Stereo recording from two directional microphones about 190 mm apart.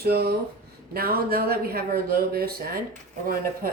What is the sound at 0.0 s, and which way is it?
Speech, 55° right (ahead or behind).